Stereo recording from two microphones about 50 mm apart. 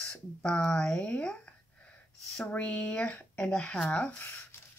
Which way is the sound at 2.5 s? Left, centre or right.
Left.